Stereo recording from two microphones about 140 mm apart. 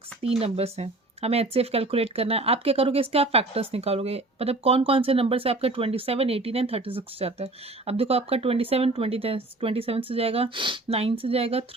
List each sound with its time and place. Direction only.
0.2 s speech: 45° right (ahead or behind)